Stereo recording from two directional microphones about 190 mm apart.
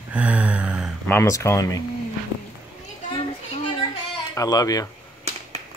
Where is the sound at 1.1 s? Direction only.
15° left (ahead or behind).